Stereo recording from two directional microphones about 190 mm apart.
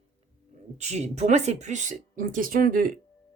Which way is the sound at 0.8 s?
35° right (ahead or behind).